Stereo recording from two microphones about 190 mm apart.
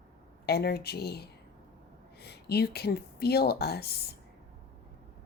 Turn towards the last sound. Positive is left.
turn(degrees=55)  # may be behind; listen again after turning